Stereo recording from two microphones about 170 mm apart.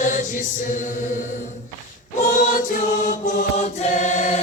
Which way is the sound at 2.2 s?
45° left (ahead or behind).